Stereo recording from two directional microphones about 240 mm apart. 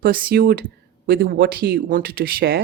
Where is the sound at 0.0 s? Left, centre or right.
Right.